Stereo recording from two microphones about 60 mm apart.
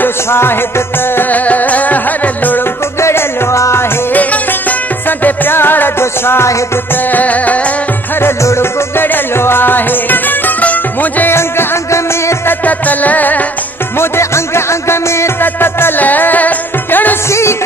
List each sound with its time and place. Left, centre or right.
0.0 s music: left
3.0 s music: left
4.1 s music: left
6.9 s music: left
8.2 s music: left
11.3 s music: left
12.4 s music: left
13.9 s music: left
15.4 s music: left
17.3 s music: left